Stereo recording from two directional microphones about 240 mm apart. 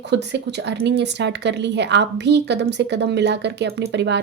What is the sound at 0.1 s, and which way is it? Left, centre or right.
Speech, right.